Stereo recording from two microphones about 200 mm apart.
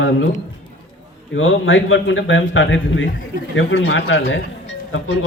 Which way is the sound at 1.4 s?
70° left (ahead or behind).